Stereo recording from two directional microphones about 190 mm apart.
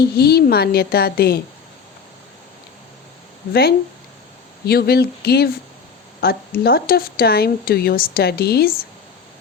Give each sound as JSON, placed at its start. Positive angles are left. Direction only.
{"t": 0.2, "sound": "a woman's voice", "side_deg": 55}
{"t": 3.5, "sound": "a woman's voice", "side_deg": 55}